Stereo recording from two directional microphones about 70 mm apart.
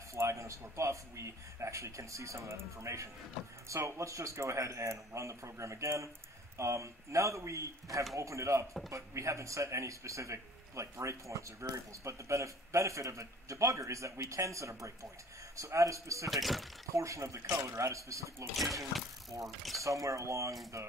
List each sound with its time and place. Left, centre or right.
0.1 s a man's voice: right
16.3 s speech: centre
16.9 s a man's voice: right
18.6 s speech: centre
19.8 s a man's voice: right